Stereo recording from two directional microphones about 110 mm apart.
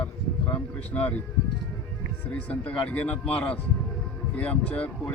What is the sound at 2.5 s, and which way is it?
Speech, 15° left (ahead or behind).